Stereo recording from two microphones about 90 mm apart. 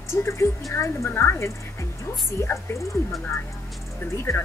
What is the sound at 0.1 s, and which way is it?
A woman's voice, 30° left (ahead or behind).